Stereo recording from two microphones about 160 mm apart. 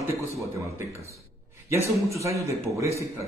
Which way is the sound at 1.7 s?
20° right (ahead or behind).